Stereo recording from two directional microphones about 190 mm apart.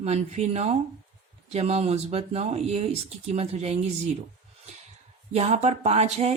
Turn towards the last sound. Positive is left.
turn(degrees=-35)  # may be behind; listen again after turning